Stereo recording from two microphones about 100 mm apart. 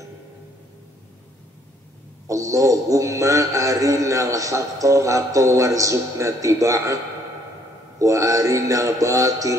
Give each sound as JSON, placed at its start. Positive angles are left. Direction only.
{"t": 2.2, "sound": "mantra", "side_deg": -35}
{"t": 8.0, "sound": "mantra", "side_deg": -30}